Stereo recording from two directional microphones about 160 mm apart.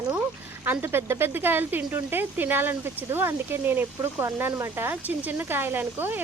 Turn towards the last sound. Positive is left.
turn(degrees=-10)  # may be behind; listen again after turning